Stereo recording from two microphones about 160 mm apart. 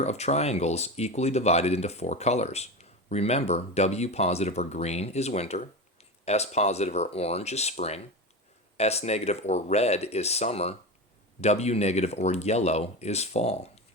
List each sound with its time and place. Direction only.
0.0 s speech: 45° left (ahead or behind)